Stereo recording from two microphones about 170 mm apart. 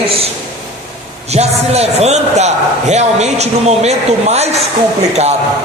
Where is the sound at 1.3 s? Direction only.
40° right (ahead or behind).